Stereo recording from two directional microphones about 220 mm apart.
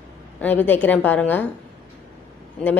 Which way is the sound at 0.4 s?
10° left (ahead or behind).